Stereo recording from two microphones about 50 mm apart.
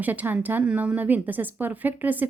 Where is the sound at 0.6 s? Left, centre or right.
Right.